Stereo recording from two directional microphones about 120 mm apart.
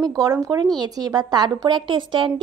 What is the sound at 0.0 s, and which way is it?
A woman's voice, 30° right (ahead or behind).